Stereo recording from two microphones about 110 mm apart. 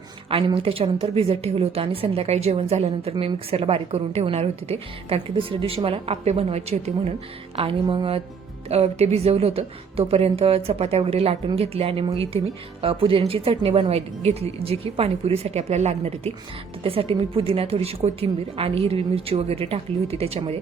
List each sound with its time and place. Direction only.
0.3 s a woman's voice: 55° right (ahead or behind); by 6.9 s 70° right (ahead or behind)
7.5 s a woman's voice: 55° right (ahead or behind)
8.7 s a woman's voice: 70° right (ahead or behind)
16.8 s a woman's voice: 60° right (ahead or behind)